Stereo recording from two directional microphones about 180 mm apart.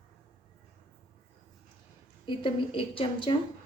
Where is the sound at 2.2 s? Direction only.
25° left (ahead or behind).